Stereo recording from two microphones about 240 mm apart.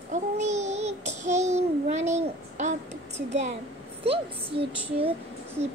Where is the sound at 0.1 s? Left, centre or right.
Right.